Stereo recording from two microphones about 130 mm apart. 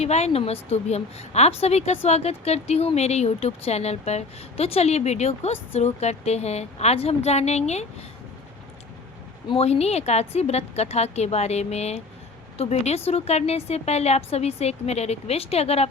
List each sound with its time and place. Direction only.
0.0 s a woman's voice: 55° left (ahead or behind)
9.5 s a woman's voice: 50° left (ahead or behind)